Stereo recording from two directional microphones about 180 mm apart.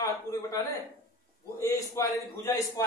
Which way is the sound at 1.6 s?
15° left (ahead or behind).